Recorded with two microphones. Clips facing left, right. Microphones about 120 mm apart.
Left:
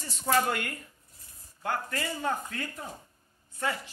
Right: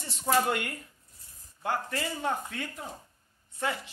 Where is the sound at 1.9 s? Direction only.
15° right (ahead or behind).